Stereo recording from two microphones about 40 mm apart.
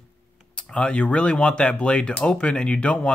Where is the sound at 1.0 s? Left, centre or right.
Left.